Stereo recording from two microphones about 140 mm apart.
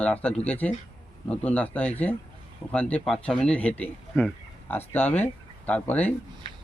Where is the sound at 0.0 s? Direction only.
10° left (ahead or behind).